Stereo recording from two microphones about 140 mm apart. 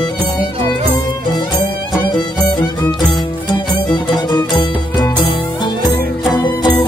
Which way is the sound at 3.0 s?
35° left (ahead or behind).